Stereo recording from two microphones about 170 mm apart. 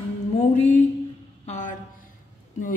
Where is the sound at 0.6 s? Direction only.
45° left (ahead or behind).